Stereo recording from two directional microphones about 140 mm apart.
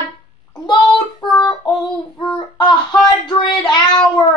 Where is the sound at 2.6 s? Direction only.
30° left (ahead or behind).